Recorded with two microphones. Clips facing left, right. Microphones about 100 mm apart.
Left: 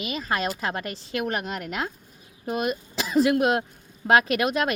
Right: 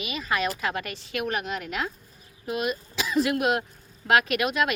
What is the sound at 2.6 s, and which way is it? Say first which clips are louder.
A woman's voice: left 1 dB; 40° left (ahead or behind).